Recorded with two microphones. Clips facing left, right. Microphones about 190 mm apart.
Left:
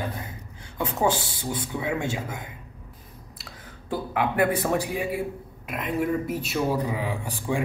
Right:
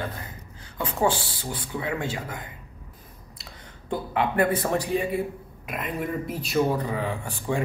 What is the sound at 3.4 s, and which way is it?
Speech, 5° left (ahead or behind).